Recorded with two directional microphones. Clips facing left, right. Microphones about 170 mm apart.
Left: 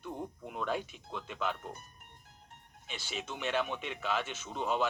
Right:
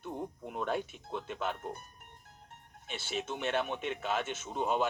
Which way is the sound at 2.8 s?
50° right (ahead or behind).